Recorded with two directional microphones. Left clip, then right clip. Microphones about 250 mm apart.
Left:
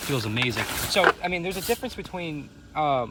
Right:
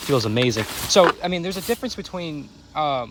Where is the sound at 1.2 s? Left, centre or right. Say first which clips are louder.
Right 2 dB; right.